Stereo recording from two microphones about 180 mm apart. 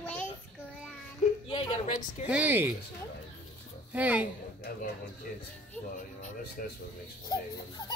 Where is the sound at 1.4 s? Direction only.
30° left (ahead or behind).